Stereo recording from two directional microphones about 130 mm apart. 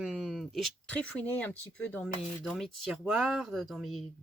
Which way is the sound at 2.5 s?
Centre (ahead or behind).